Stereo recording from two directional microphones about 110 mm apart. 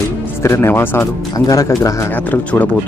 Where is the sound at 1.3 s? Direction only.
35° left (ahead or behind).